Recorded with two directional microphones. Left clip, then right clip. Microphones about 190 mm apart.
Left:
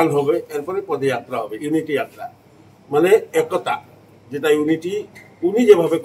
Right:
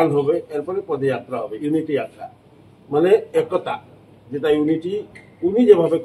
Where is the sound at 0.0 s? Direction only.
15° left (ahead or behind).